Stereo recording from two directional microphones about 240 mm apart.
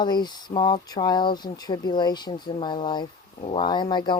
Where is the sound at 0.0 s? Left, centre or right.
Centre.